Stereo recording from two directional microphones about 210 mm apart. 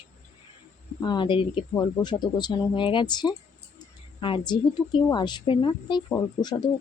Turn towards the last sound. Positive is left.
turn(degrees=15)  # may be behind; listen again after turning